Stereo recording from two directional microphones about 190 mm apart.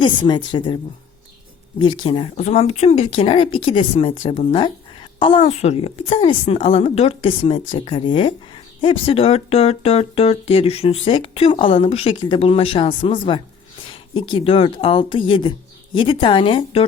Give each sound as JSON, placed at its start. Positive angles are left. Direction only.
{"t": 0.0, "sound": "speech", "side_deg": 25}
{"t": 1.8, "sound": "speech", "side_deg": 25}
{"t": 14.1, "sound": "speech", "side_deg": 25}